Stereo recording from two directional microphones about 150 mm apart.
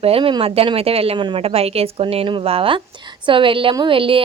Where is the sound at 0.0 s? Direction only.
40° right (ahead or behind).